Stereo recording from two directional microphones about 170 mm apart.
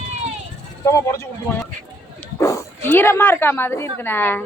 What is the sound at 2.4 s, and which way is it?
Speech, 20° left (ahead or behind).